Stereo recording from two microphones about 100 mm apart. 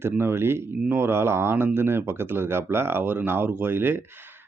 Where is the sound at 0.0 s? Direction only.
25° right (ahead or behind).